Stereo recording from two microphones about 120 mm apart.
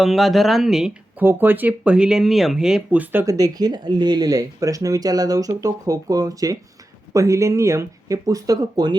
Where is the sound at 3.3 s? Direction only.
30° right (ahead or behind).